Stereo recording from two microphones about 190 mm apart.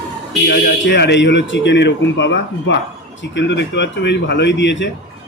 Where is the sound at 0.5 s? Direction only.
65° left (ahead or behind).